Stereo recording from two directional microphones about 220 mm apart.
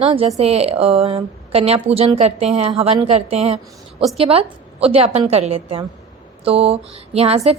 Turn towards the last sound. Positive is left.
turn(degrees=-25)  # may be behind; listen again after turning